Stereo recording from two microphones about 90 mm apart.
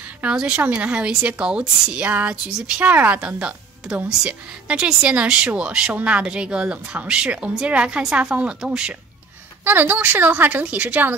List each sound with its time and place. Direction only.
0.2 s a woman's voice: 10° right (ahead or behind)
9.7 s a woman's voice: 20° right (ahead or behind)